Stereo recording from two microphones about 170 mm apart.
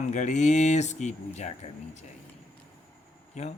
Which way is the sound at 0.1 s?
45° left (ahead or behind).